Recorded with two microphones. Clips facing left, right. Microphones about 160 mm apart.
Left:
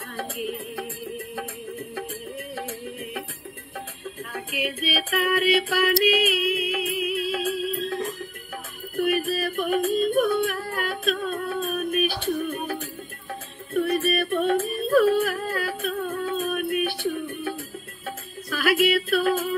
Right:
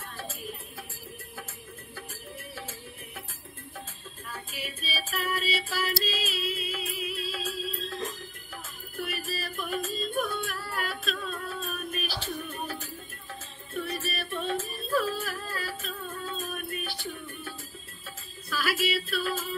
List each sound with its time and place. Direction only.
0.2 s music: 65° left (ahead or behind)
4.3 s music: 65° left (ahead or behind)
8.9 s yodeling: 55° left (ahead or behind)
13.3 s music: 55° left (ahead or behind)